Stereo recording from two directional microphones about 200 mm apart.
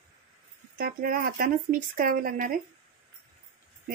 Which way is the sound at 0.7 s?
50° right (ahead or behind).